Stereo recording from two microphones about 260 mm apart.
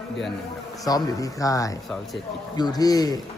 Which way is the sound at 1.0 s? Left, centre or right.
Centre.